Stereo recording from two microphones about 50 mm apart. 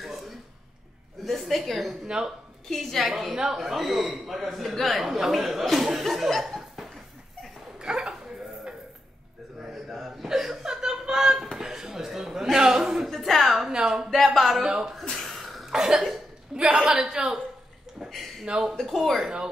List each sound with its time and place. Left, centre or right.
1.2 s a sound: centre
2.0 s a woman's voice: centre
2.7 s a man's voice: centre
7.8 s a sound: centre
9.7 s chuckle: centre
11.5 s a sound: centre
13.7 s a woman's voice: centre
14.1 s a man's voice: centre
14.6 s a woman's voice: centre
15.0 s cough: centre
16.5 s a woman's voice: right
17.0 s a woman's voice: centre
18.4 s a woman's voice: centre
18.8 s a man's voice: centre